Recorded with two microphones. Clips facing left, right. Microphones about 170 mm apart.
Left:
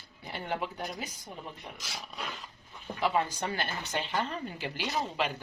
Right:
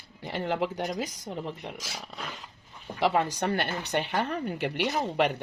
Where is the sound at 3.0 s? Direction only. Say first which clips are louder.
Right 4 dB; 80° right.